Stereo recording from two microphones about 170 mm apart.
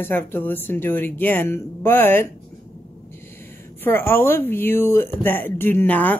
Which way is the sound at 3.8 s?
15° left (ahead or behind).